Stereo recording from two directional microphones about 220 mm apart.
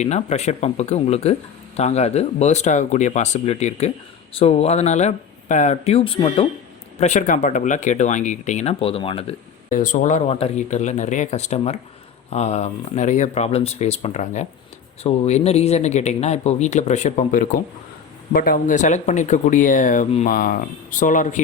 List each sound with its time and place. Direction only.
0.0 s speech: 30° left (ahead or behind)
9.6 s speech: 35° left (ahead or behind)